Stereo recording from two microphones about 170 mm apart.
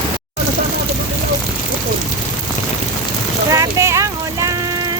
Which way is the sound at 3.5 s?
15° right (ahead or behind).